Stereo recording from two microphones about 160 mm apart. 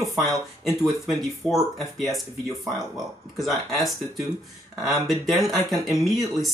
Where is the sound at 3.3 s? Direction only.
Centre (ahead or behind).